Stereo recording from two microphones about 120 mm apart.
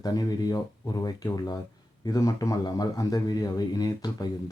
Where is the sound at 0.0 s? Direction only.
35° left (ahead or behind).